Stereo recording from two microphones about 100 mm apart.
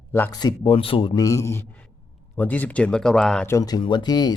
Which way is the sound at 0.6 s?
65° left (ahead or behind).